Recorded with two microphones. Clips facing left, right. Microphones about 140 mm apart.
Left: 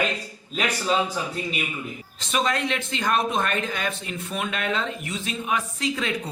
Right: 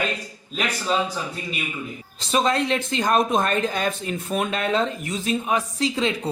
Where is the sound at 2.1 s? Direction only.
35° right (ahead or behind).